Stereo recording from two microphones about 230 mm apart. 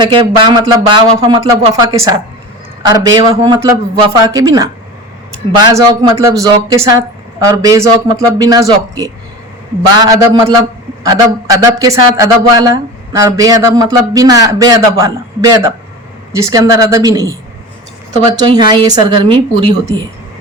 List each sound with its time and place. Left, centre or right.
0.0 s a man's voice: right
18.3 s speech: centre